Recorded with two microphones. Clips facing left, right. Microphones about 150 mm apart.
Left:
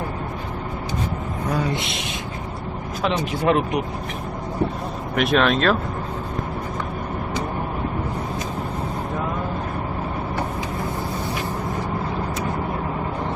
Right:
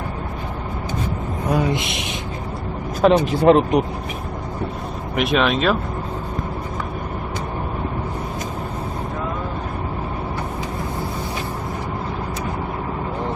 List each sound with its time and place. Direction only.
1.5 s speech: 15° right (ahead or behind)
3.0 s speech: 40° right (ahead or behind)
5.1 s speech: centre (ahead or behind)